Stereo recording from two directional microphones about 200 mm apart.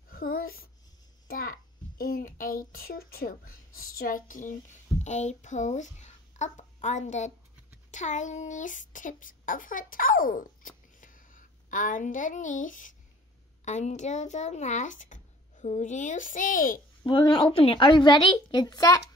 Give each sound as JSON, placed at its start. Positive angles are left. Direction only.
{"t": 0.1, "sound": "babbling", "side_deg": 45}
{"t": 1.2, "sound": "a sound", "side_deg": 45}
{"t": 2.7, "sound": "a woman's voice", "side_deg": 50}
{"t": 17.0, "sound": "a woman's voice", "side_deg": 25}